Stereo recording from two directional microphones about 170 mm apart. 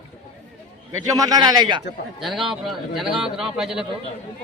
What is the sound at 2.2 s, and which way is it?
A man's voice, centre (ahead or behind).